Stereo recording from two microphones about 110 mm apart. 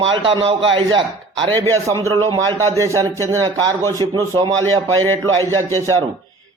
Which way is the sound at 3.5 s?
35° right (ahead or behind).